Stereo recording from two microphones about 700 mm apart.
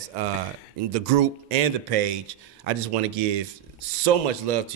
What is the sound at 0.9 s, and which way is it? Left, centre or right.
Speech, right.